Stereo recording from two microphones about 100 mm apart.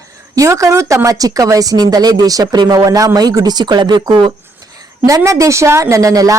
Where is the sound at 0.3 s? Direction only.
30° right (ahead or behind); by 4.3 s 50° right (ahead or behind).